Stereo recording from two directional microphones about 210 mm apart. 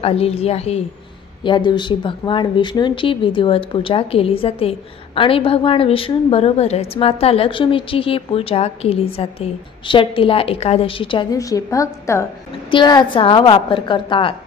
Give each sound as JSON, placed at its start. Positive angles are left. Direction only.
{"t": 0.0, "sound": "speech", "side_deg": 30}